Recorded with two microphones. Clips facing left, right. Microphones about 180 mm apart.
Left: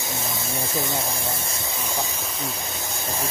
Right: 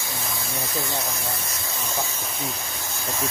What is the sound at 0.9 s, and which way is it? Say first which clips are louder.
Speech: left 2 dB; 25° left (ahead or behind).